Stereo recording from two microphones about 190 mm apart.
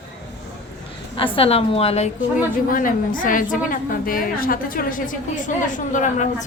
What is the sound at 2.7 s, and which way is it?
A woman's voice, 45° left (ahead or behind).